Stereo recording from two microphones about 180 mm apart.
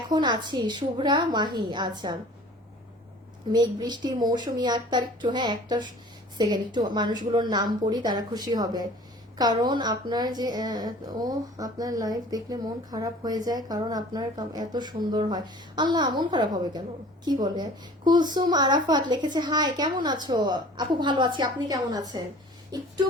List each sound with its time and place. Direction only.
0.1 s a woman's voice: 25° right (ahead or behind)
3.5 s a woman's voice: 20° right (ahead or behind)